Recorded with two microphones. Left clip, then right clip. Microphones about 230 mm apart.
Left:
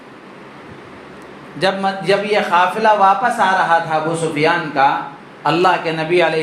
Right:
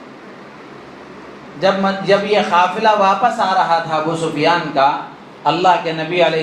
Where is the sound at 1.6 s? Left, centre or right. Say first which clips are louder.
Right 2 dB; left.